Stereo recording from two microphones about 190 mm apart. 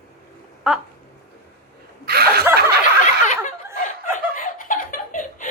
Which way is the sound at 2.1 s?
55° right (ahead or behind).